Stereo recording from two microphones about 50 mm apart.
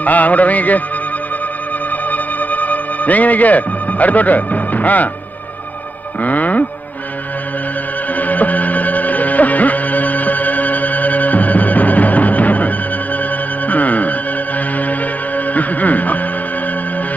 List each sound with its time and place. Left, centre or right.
0.0 s music: left
2.0 s music: left
6.2 s music: left
8.1 s music: left